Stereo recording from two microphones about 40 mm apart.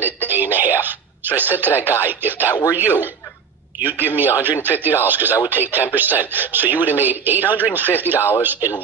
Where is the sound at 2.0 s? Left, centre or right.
Right.